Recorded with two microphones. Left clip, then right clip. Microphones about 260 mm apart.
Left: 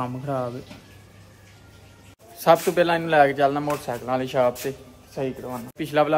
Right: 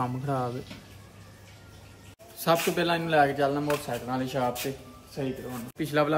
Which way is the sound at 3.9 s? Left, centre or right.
Left.